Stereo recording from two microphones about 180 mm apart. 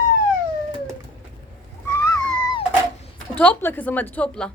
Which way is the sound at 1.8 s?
15° left (ahead or behind).